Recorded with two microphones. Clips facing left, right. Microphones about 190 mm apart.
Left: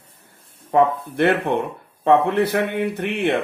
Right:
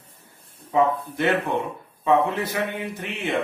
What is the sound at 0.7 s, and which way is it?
A man's voice, 55° left (ahead or behind).